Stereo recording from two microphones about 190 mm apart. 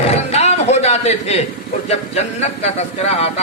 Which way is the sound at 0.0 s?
35° left (ahead or behind).